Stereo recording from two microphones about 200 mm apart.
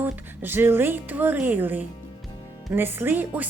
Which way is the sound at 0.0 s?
10° right (ahead or behind).